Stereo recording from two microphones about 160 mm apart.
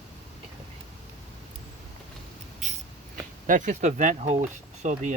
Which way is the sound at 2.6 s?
50° right (ahead or behind).